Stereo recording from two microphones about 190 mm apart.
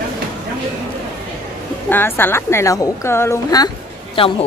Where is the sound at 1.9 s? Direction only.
10° left (ahead or behind).